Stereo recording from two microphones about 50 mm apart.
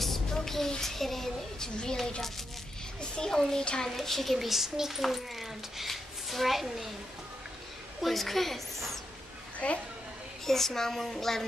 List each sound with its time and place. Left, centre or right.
0.0 s a child's voice: centre
3.9 s a child's voice: centre
8.0 s a child's voice: centre
9.6 s a child's voice: left
10.4 s a child's voice: centre